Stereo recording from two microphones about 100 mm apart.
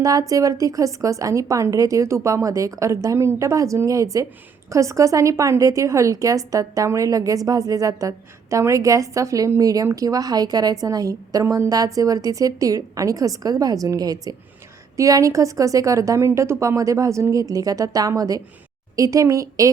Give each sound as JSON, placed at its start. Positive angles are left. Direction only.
{"t": 0.0, "sound": "a woman's voice", "side_deg": -35}